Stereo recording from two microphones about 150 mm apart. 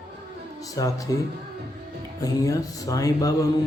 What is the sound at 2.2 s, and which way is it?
A man's voice, 20° left (ahead or behind).